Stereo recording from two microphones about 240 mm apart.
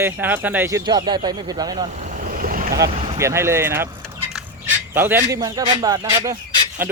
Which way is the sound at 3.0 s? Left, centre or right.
Centre.